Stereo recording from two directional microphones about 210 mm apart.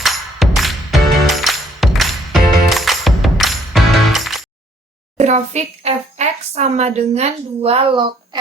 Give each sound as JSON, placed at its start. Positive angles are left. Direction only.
{"t": 0.0, "sound": "music", "side_deg": 0}
{"t": 5.1, "sound": "speech", "side_deg": -30}